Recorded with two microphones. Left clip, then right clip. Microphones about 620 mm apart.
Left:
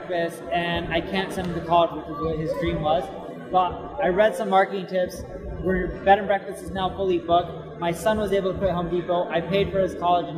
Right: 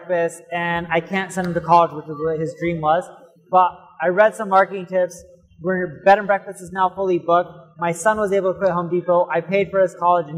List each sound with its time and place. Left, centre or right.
0.1 s a man's voice: right